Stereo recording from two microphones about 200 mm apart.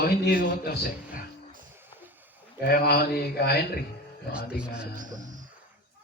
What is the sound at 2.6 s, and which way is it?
A man's voice, 50° left (ahead or behind).